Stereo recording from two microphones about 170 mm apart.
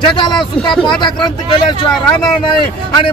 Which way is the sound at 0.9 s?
25° left (ahead or behind).